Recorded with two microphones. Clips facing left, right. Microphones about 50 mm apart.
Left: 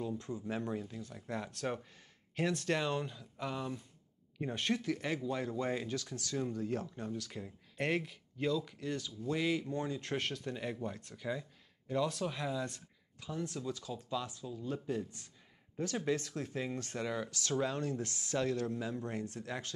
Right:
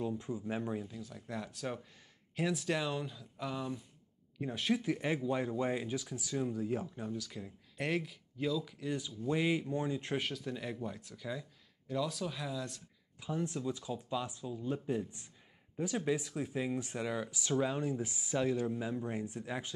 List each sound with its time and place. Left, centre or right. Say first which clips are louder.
0.2 s speech: right 1 dB; centre
0.8 s speech: left 1 dB; centre
4.8 s speech: right 2 dB; centre
7.1 s speech: even; centre
8.9 s speech: right 2 dB; centre
10.2 s speech: even; centre
11.1 s speech: left 2 dB; centre
12.3 s speech: left 2 dB; centre
13.2 s speech: right 3 dB; centre